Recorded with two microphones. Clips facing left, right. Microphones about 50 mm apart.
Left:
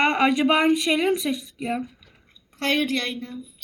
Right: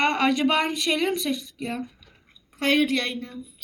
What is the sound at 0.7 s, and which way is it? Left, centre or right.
Speech, centre.